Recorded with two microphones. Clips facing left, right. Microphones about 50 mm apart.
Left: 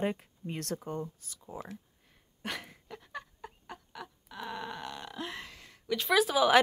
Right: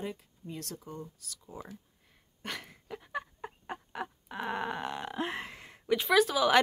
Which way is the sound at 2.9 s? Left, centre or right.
Centre.